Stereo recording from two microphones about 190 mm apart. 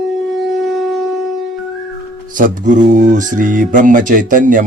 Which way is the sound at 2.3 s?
45° right (ahead or behind).